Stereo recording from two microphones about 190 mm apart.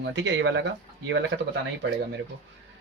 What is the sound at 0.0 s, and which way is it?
Speech, 70° right (ahead or behind).